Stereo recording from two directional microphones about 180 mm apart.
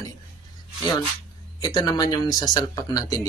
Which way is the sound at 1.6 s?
20° left (ahead or behind).